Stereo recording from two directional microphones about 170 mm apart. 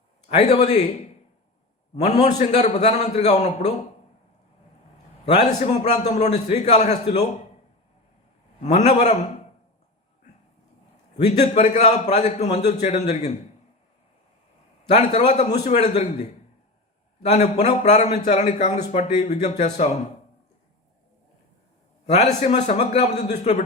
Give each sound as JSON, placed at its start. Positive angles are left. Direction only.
{"t": 0.3, "sound": "a man's voice", "side_deg": 40}
{"t": 2.0, "sound": "a man's voice", "side_deg": 40}
{"t": 5.2, "sound": "a man's voice", "side_deg": 40}
{"t": 8.6, "sound": "a man's voice", "side_deg": 40}
{"t": 11.6, "sound": "a man's voice", "side_deg": 45}
{"t": 14.8, "sound": "a man's voice", "side_deg": 40}
{"t": 17.3, "sound": "a man's voice", "side_deg": 40}
{"t": 22.0, "sound": "a man's voice", "side_deg": 40}